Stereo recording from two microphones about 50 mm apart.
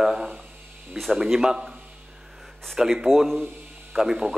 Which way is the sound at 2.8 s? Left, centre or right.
Centre.